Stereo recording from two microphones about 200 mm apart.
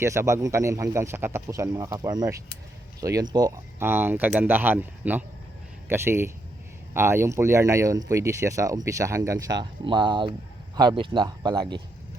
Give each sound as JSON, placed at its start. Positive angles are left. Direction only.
{"t": 0.0, "sound": "speech", "side_deg": -15}